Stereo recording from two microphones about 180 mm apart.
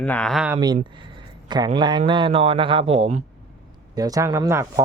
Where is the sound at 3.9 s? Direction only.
20° right (ahead or behind).